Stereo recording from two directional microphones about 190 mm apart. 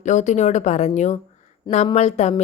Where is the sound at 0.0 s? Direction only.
40° left (ahead or behind).